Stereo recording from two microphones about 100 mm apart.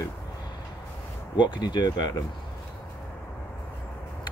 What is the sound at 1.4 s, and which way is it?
Speech, 50° left (ahead or behind).